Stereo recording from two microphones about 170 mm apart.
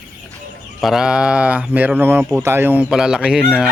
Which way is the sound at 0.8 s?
Centre (ahead or behind).